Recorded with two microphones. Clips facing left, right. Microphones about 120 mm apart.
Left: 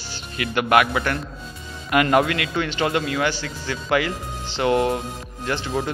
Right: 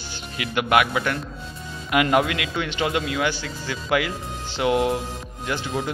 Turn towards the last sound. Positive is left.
turn(degrees=-5)  # may be behind; listen again after turning